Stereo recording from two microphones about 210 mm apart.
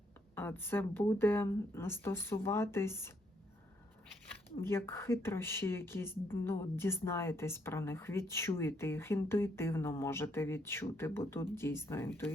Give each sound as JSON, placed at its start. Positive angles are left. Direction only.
{"t": 0.3, "sound": "a woman's voice", "side_deg": 10}
{"t": 4.6, "sound": "a woman's voice", "side_deg": 10}